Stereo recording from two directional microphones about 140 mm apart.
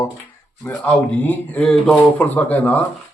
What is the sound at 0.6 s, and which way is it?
A man's voice, 10° left (ahead or behind).